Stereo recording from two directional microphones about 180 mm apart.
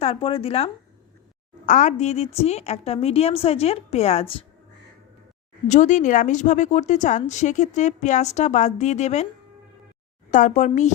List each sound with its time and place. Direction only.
0.0 s a woman's voice: 35° left (ahead or behind)
1.6 s a woman's voice: 45° left (ahead or behind)
5.6 s a woman's voice: 40° left (ahead or behind)
10.3 s a woman's voice: 45° left (ahead or behind)